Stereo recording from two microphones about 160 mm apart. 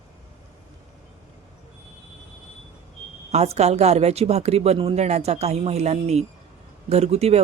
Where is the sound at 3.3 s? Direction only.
40° right (ahead or behind).